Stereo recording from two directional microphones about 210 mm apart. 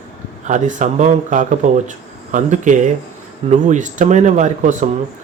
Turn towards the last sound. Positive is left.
turn(degrees=-35)  # may be behind; listen again after turning